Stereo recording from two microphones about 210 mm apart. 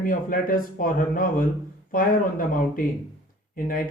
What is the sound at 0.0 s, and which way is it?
Speech, 40° left (ahead or behind).